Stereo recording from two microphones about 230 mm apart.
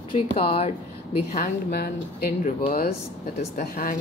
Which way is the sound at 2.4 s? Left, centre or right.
Left.